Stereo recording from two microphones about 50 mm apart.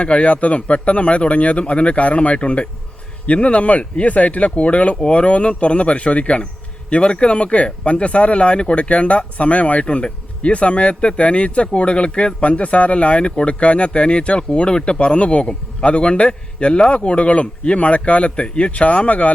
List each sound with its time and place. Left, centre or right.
0.0 s speech: left